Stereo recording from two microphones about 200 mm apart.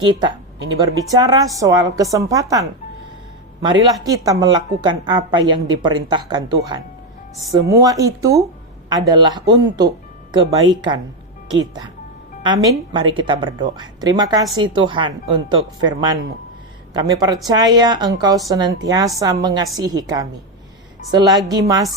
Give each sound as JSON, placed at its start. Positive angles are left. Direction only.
{"t": 0.0, "sound": "a woman's voice", "side_deg": -20}
{"t": 4.0, "sound": "a woman's voice", "side_deg": -15}